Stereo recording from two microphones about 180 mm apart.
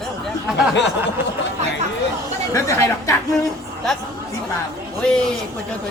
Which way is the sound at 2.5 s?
15° left (ahead or behind).